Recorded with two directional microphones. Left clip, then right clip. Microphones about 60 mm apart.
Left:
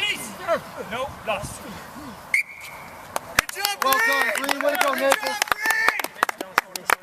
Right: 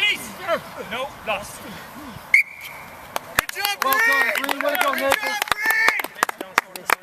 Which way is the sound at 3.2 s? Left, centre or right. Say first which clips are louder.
Right 1 dB; centre.